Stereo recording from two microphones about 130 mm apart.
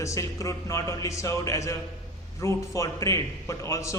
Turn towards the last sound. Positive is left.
turn(degrees=25)  # may be behind; listen again after turning